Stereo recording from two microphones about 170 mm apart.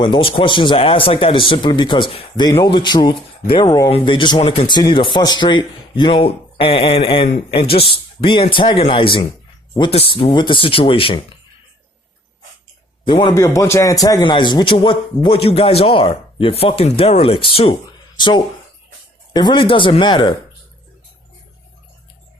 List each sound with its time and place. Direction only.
0.0 s a man's voice: 30° left (ahead or behind)
13.1 s a man's voice: 25° left (ahead or behind)